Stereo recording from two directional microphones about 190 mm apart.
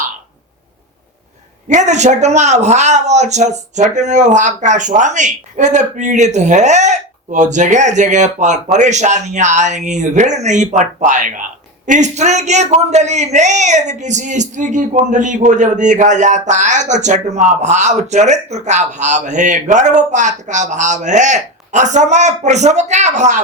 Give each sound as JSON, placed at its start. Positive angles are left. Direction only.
{"t": 1.6, "sound": "a man's voice", "side_deg": -40}